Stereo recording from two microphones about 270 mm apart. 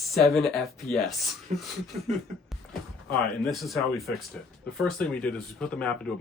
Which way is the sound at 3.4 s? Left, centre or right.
Centre.